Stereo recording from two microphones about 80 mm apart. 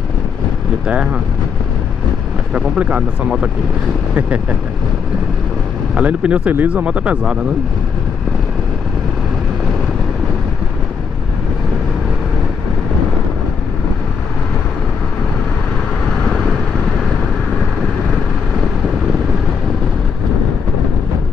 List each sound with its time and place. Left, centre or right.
0.8 s speech: centre
2.5 s speech: centre
5.9 s speech: centre